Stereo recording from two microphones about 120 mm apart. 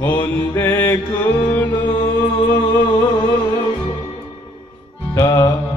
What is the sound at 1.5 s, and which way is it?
Music, 15° left (ahead or behind).